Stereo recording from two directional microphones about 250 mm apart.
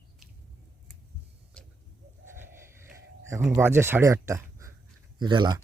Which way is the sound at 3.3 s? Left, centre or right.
Centre.